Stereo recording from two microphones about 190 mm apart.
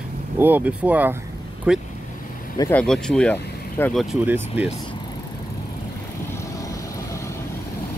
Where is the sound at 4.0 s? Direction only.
5° right (ahead or behind).